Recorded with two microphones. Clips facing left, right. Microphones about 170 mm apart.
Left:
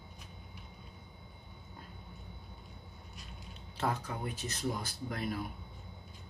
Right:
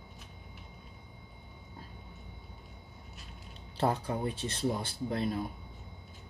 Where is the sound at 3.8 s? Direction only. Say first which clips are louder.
Right 5 dB; 30° right (ahead or behind).